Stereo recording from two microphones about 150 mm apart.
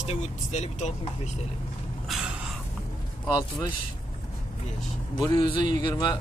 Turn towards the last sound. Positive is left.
turn(degrees=30)  # may be behind; listen again after turning